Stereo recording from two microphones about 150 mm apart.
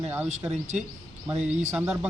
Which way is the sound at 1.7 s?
15° right (ahead or behind).